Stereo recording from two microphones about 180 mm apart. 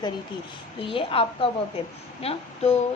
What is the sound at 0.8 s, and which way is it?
A woman's voice, 30° left (ahead or behind).